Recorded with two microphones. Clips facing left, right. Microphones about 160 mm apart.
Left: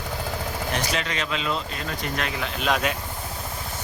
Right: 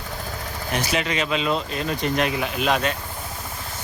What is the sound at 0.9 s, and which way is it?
Speech, 10° right (ahead or behind).